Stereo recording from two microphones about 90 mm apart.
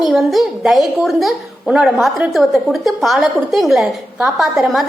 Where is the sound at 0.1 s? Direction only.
Centre (ahead or behind).